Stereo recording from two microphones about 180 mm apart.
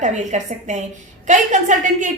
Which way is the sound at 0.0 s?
40° right (ahead or behind).